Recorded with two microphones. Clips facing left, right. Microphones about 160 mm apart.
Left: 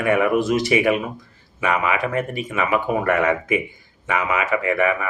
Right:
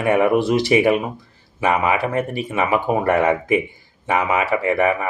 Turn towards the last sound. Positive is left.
turn(degrees=-35)  # may be behind; listen again after turning